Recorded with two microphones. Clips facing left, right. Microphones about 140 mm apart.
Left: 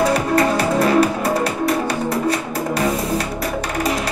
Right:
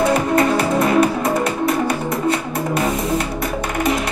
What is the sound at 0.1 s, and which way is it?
Music, 30° left (ahead or behind).